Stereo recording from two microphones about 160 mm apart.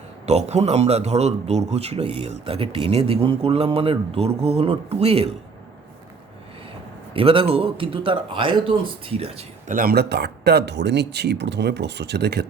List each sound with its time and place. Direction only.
0.3 s speech: 45° right (ahead or behind)
7.1 s speech: 35° right (ahead or behind)
9.6 s speech: 60° right (ahead or behind); by 12.5 s 90° right